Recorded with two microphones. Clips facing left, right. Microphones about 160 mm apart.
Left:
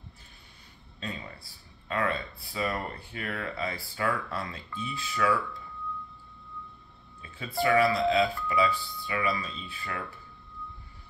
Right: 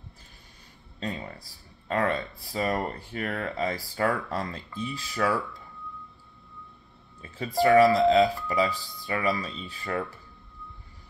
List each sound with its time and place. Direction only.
1.9 s speech: 40° right (ahead or behind)
7.2 s speech: 40° right (ahead or behind)